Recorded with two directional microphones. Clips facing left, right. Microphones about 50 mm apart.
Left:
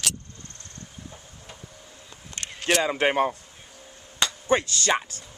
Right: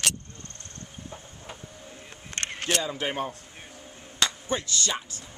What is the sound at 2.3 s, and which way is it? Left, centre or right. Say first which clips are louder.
Single-lens reflex camera: right 4 dB; right.